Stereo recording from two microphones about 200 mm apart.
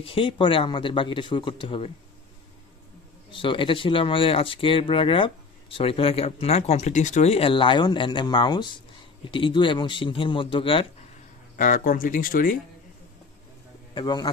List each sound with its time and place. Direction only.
0.0 s speech: 25° left (ahead or behind)
3.3 s speech: 25° left (ahead or behind)
11.5 s speech: 40° left (ahead or behind)
13.9 s speech: 20° left (ahead or behind)